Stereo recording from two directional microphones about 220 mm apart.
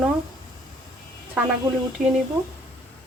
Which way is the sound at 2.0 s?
35° right (ahead or behind).